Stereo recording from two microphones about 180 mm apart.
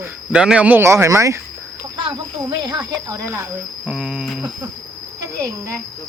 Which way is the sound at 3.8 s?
5° right (ahead or behind).